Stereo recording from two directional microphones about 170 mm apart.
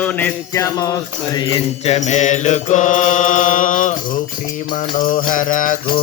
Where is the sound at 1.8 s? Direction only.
40° left (ahead or behind).